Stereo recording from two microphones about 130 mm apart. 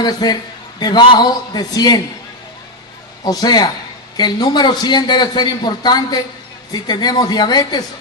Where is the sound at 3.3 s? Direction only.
30° left (ahead or behind).